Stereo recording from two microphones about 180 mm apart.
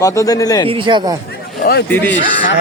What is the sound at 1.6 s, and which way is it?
Speech, 60° left (ahead or behind).